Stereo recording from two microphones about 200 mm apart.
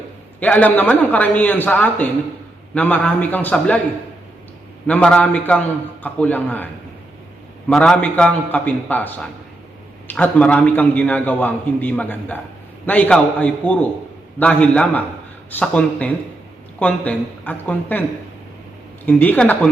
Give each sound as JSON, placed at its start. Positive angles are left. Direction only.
{"t": 0.3, "sound": "a man's voice", "side_deg": 10}
{"t": 4.9, "sound": "a man's voice", "side_deg": 5}
{"t": 7.7, "sound": "a man's voice", "side_deg": 5}
{"t": 19.0, "sound": "a man's voice", "side_deg": 10}